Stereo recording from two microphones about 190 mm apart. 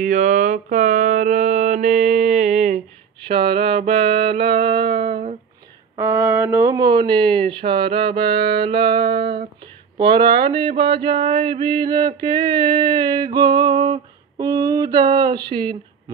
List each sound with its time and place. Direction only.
0.0 s mantra: 40° right (ahead or behind)
3.3 s music: 30° right (ahead or behind)
5.9 s speech: 15° right (ahead or behind)
12.7 s a sound: 25° right (ahead or behind)
15.5 s speech: 25° right (ahead or behind)